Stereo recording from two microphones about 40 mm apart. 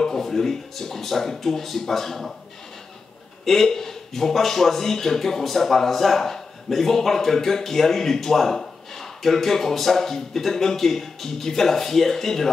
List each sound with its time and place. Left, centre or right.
0.0 s speech: centre
3.4 s speech: centre